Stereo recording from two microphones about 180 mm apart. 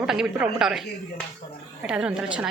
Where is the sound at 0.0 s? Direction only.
5° right (ahead or behind).